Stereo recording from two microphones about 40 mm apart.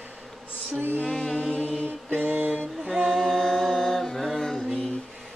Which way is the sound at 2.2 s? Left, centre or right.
Right.